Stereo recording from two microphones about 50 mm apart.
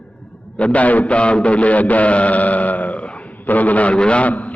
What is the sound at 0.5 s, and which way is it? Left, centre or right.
A man's voice, left.